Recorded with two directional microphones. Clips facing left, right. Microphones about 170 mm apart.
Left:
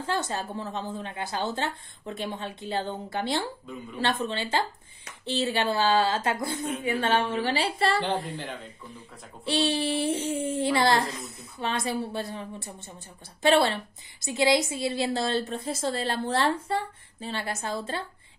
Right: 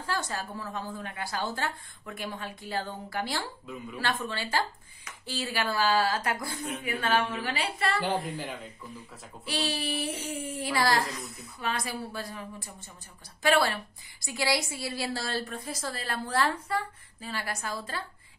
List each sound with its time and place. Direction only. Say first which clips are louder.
0.0 s a woman's voice: left 4 dB; 25° left (ahead or behind)
8.0 s speech: left 1 dB; 10° right (ahead or behind)
9.4 s a woman's voice: left 6 dB; 30° left (ahead or behind)